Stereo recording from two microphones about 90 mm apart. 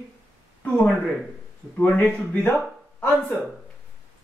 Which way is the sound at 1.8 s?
15° left (ahead or behind).